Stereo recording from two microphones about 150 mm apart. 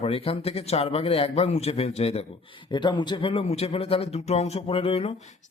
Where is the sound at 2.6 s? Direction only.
30° left (ahead or behind).